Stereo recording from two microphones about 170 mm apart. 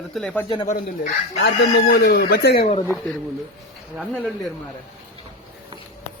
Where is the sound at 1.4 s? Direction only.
80° left.